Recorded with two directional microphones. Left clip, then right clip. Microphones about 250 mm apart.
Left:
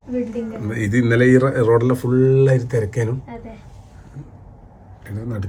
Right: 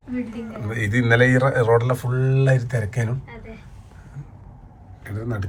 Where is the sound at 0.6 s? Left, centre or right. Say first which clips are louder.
Left 1 dB; right.